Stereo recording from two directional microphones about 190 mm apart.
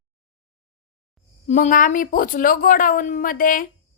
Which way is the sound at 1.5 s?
40° left (ahead or behind).